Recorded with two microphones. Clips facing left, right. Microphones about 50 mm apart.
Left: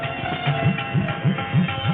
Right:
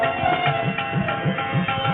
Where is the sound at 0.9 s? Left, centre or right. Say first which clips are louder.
Right 1 dB; centre.